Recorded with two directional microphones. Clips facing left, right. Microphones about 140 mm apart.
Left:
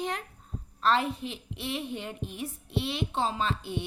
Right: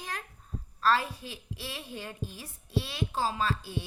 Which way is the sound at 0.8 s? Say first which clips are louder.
Left 1 dB; 25° left (ahead or behind).